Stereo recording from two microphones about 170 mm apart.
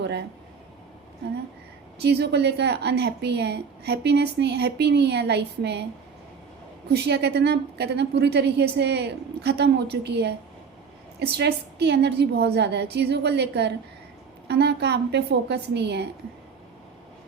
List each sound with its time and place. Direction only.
0.0 s speech: 85° right
2.0 s a woman's voice: 80° right
6.9 s a woman's voice: 75° right (ahead or behind)
11.2 s a woman's voice: 75° right (ahead or behind)